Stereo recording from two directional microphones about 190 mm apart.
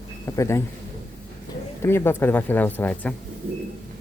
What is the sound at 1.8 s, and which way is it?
Speech, 10° left (ahead or behind).